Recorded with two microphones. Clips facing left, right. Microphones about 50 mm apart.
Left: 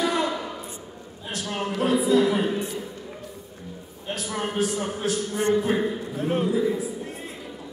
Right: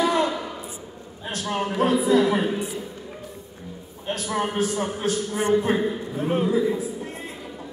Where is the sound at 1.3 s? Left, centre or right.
Right.